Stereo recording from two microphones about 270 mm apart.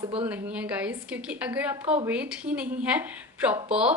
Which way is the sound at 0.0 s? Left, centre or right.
Centre.